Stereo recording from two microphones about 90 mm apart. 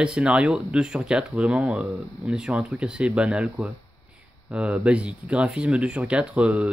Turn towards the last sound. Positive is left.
turn(degrees=-15)  # may be behind; listen again after turning